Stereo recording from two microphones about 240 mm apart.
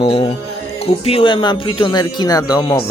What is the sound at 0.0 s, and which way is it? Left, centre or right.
Music, left.